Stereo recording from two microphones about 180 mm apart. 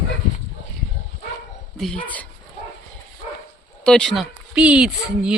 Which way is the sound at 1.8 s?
5° left (ahead or behind).